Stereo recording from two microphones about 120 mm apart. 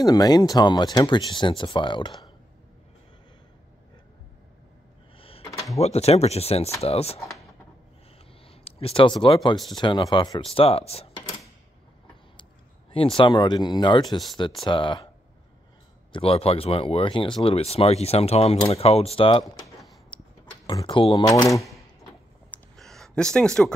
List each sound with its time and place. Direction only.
0.0 s speech: 30° left (ahead or behind)
5.2 s a sound: 50° left (ahead or behind)
5.8 s speech: 60° left (ahead or behind)
7.2 s speech: centre (ahead or behind)
8.5 s speech: 55° left (ahead or behind); by 10.4 s 35° left (ahead or behind)
10.4 s speech: 55° left (ahead or behind)
12.9 s speech: 50° left (ahead or behind)
16.1 s speech: 50° left (ahead or behind)
19.4 s a sound: centre (ahead or behind)
20.8 s speech: 45° left (ahead or behind)
21.2 s speech: 30° left (ahead or behind)
22.8 s a sound: 5° left (ahead or behind)